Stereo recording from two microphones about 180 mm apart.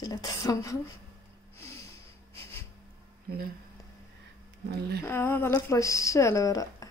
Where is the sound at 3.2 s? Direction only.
60° right (ahead or behind).